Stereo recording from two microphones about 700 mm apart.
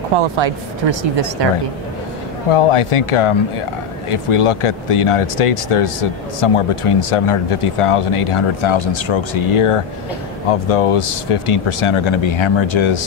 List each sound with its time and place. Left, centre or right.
0.2 s speech: right
2.5 s speech: left